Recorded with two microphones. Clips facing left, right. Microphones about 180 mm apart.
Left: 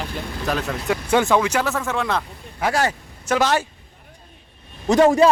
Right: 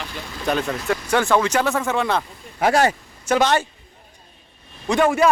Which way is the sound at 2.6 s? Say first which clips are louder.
Right 4 dB; 20° right (ahead or behind).